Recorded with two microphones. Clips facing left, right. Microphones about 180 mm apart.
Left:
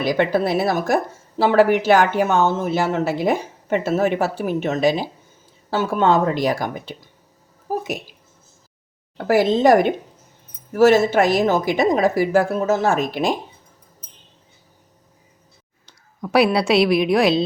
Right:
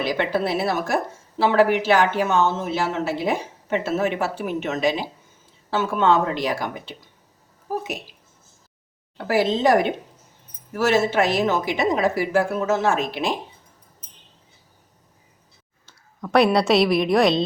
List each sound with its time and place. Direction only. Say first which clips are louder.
0.0 s speech: left 4 dB; 45° left (ahead or behind)
9.1 s speech: left 4 dB; 45° left (ahead or behind)
10.8 s speech: left 6 dB; 45° left (ahead or behind)
16.2 s a woman's voice: left 1 dB; 5° left (ahead or behind)